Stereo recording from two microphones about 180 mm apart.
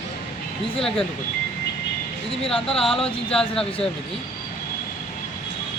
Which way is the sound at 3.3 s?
5° left (ahead or behind).